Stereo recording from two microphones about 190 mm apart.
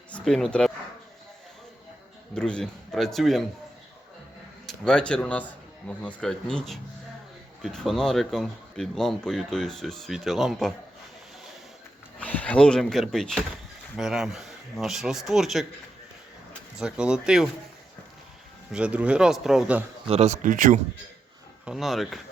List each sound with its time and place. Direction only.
0.1 s speech: centre (ahead or behind)
2.3 s speech: 5° left (ahead or behind)
4.6 s speech: 5° left (ahead or behind)
12.2 s speech: 10° left (ahead or behind)
18.7 s speech: 5° right (ahead or behind)
20.1 s speech: 35° right (ahead or behind)
21.6 s speech: centre (ahead or behind)